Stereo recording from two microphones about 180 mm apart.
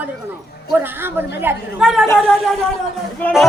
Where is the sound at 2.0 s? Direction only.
15° left (ahead or behind).